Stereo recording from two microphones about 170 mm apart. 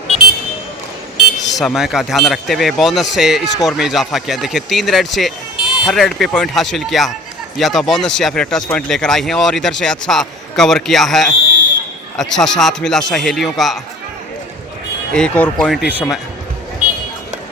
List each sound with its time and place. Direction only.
1.5 s speech: centre (ahead or behind)
15.1 s speech: 5° left (ahead or behind)